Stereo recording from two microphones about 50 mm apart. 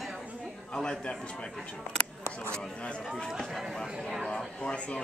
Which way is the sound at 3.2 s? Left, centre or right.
Centre.